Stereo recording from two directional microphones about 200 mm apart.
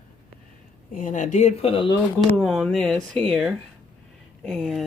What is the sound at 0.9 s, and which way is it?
Speech, 40° left (ahead or behind).